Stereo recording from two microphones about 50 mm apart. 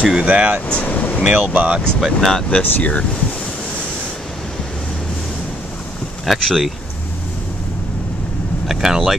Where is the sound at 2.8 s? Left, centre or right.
Left.